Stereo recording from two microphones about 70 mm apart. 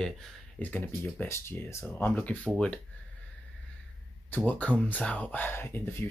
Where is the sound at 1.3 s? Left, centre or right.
Left.